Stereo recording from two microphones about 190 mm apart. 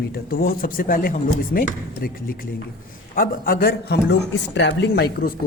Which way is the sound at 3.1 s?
50° left (ahead or behind).